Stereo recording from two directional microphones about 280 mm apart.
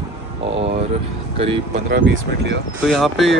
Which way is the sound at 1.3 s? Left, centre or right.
Centre.